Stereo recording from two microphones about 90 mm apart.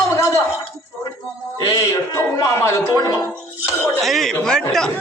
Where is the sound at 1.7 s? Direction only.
35° left (ahead or behind).